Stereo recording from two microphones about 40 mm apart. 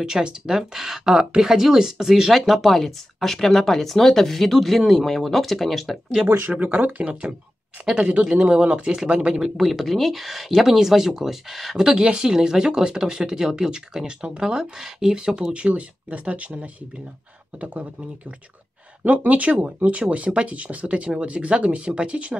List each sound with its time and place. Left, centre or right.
0.0 s speech: centre
2.4 s speech: centre
6.3 s speech: right
8.0 s speech: right
9.6 s speech: centre
11.7 s speech: centre
15.5 s speech: right
19.0 s speech: right